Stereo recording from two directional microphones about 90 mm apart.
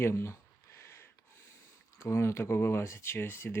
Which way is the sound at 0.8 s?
25° left (ahead or behind).